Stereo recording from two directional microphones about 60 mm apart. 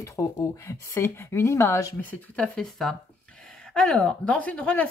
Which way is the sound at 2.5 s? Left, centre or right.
Centre.